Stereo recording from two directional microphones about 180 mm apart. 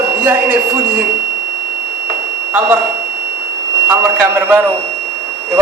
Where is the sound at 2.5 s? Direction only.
10° right (ahead or behind).